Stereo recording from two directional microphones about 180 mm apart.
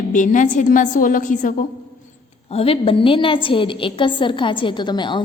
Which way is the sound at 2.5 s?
35° left (ahead or behind).